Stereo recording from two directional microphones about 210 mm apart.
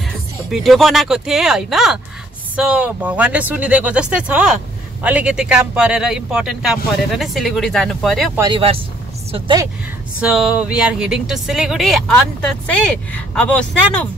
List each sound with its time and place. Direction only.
0.5 s a man's voice: centre (ahead or behind)
8.4 s speech: 25° right (ahead or behind)
10.2 s a man's voice: 5° right (ahead or behind)